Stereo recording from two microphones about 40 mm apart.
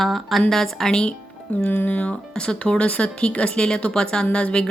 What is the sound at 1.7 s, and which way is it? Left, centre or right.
Speech, left.